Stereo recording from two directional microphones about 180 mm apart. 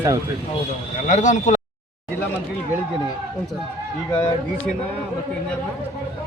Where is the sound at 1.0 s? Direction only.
40° left (ahead or behind).